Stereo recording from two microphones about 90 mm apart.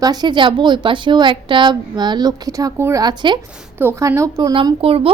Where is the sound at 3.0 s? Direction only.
60° right (ahead or behind).